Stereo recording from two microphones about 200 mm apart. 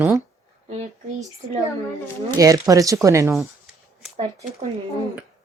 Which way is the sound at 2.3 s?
15° right (ahead or behind).